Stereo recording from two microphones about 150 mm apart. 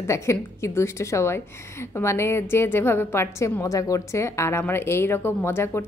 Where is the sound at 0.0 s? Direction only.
20° left (ahead or behind).